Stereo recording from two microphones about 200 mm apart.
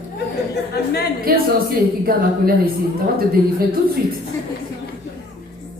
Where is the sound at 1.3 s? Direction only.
45° right (ahead or behind).